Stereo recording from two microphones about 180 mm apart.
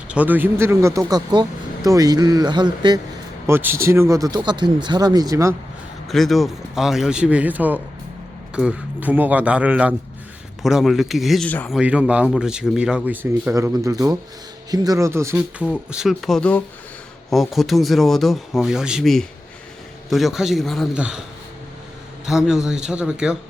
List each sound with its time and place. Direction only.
0.1 s speech: 10° right (ahead or behind); by 3.0 s 25° right (ahead or behind)
3.4 s speech: 15° right (ahead or behind)
6.1 s speech: centre (ahead or behind)
11.8 s speech: 5° right (ahead or behind)
22.3 s speech: 5° right (ahead or behind)